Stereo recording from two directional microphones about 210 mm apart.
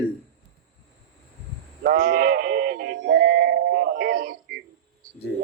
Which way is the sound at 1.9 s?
45° right (ahead or behind).